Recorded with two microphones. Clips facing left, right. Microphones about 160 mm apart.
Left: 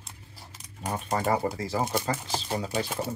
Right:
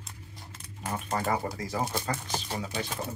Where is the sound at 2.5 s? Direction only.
40° left (ahead or behind).